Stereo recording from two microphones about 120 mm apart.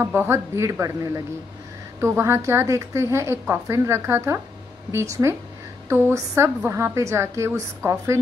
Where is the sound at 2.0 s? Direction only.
20° right (ahead or behind).